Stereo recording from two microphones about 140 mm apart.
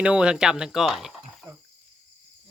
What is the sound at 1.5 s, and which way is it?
Cricket, 20° right (ahead or behind).